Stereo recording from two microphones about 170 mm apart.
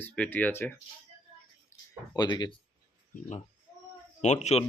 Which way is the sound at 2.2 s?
25° left (ahead or behind).